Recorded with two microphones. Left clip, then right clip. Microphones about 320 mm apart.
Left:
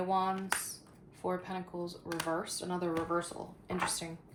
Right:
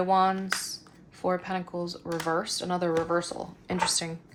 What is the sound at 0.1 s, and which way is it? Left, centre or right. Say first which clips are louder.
Speech: right 8 dB; right.